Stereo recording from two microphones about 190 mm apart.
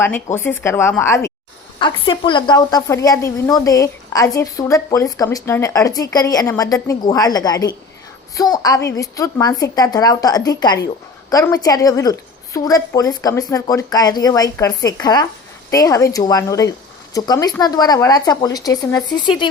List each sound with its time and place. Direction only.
0.0 s speech: 10° left (ahead or behind)
1.8 s speech: 25° left (ahead or behind)